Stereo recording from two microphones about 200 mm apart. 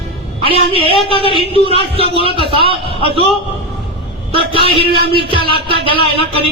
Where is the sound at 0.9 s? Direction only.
25° left (ahead or behind).